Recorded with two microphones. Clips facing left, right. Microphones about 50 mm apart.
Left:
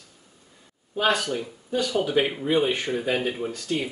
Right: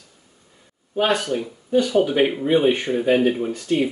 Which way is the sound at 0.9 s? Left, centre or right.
Centre.